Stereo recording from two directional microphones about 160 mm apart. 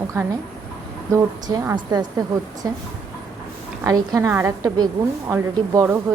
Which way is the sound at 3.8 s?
20° right (ahead or behind).